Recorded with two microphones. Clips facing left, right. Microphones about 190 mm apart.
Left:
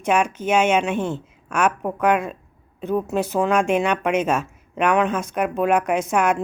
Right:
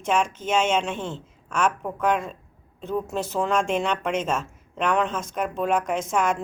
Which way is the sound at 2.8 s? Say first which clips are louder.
Left 5 dB; 10° left (ahead or behind).